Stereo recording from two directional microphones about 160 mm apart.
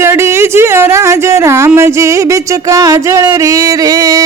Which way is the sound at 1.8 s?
15° right (ahead or behind).